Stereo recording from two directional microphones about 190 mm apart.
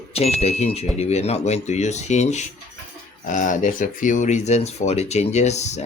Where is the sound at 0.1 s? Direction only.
30° left (ahead or behind).